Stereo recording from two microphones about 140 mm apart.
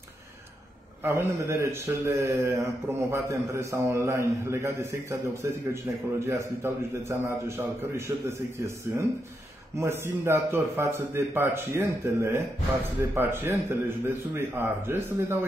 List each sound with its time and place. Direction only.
1.0 s a man's voice: 20° right (ahead or behind)